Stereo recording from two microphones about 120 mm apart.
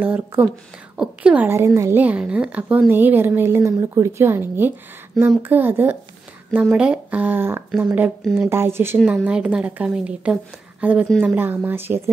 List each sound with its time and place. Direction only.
0.0 s a woman's voice: 15° right (ahead or behind)
9.0 s a woman's voice: 10° right (ahead or behind)